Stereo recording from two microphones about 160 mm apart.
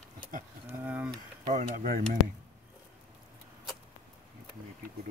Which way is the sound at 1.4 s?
55° right (ahead or behind).